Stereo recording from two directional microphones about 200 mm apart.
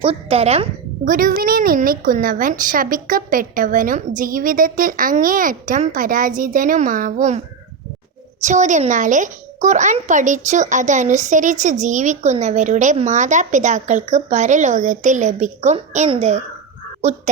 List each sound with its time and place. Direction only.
0.0 s a woman's voice: 30° right (ahead or behind)